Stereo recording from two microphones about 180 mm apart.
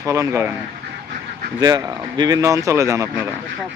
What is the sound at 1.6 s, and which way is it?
Speech, 25° right (ahead or behind).